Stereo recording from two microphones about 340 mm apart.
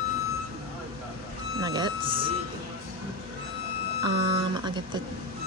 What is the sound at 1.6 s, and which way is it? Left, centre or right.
Speech, centre.